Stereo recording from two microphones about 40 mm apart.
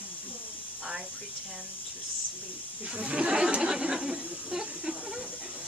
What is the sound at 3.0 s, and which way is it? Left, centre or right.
Speech, right.